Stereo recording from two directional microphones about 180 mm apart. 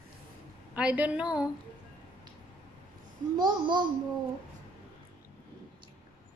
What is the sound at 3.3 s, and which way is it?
Speech, 25° right (ahead or behind).